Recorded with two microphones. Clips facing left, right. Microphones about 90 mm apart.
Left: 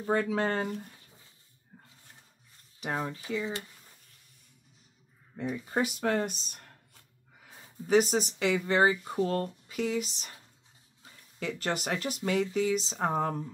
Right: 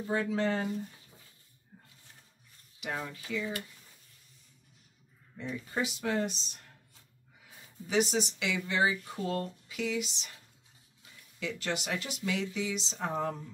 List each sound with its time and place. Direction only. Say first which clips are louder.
0.0 s speech: left 2 dB; 55° left (ahead or behind)
1.7 s wild animals: left 2 dB; 55° left (ahead or behind)
2.8 s speech: left 4 dB; 35° left (ahead or behind)
5.3 s speech: left 5 dB; 40° left (ahead or behind)